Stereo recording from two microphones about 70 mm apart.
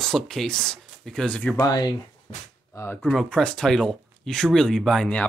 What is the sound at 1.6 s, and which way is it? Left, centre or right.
Speech, left.